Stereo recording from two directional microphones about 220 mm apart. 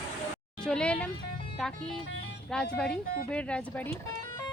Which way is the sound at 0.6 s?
5° left (ahead or behind).